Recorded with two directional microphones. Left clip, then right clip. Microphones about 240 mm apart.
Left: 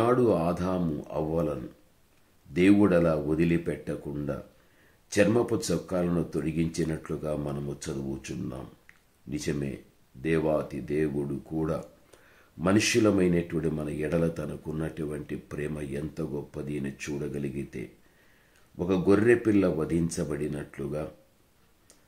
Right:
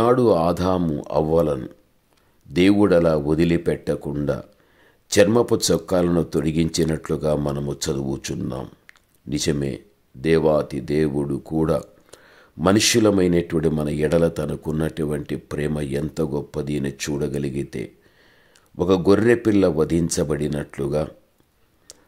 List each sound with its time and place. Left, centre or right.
0.0 s speech: right